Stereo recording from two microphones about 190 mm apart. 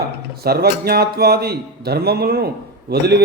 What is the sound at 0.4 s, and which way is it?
A man's voice, 55° right (ahead or behind).